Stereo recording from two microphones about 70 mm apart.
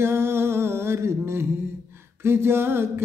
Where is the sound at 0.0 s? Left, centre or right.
Right.